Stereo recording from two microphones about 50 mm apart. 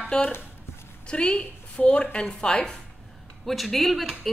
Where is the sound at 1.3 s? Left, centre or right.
Left.